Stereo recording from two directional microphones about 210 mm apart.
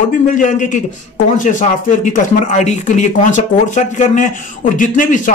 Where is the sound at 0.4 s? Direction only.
35° left (ahead or behind).